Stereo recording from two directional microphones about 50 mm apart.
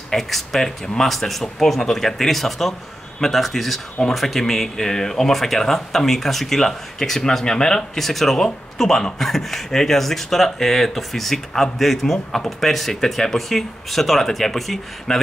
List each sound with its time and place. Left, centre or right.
0.1 s speech: centre